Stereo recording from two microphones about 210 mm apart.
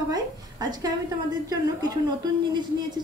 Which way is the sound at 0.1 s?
20° right (ahead or behind).